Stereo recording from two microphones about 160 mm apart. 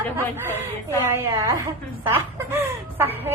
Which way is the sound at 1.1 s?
20° right (ahead or behind).